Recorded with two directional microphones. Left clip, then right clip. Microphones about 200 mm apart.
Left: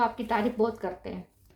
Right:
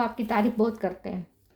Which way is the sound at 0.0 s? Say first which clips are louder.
Right 1 dB; 45° right (ahead or behind).